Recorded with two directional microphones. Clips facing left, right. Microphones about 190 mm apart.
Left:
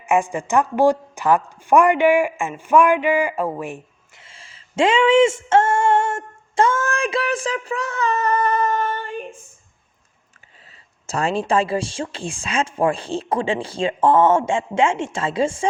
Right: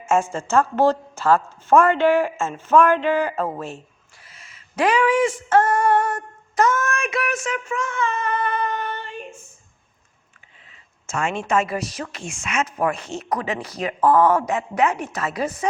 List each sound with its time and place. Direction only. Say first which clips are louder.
0.0 s a woman's voice: left 1 dB; 15° left (ahead or behind); by 9.2 s 50° left (ahead or behind)
10.7 s a woman's voice: left 2 dB; 35° left (ahead or behind)